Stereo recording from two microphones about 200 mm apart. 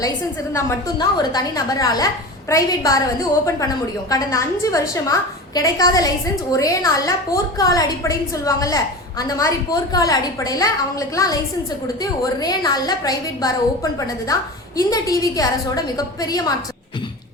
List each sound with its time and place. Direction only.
0.5 s a woman's voice: 20° left (ahead or behind)